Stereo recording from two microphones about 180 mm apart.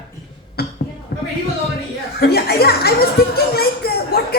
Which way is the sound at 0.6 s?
60° left (ahead or behind).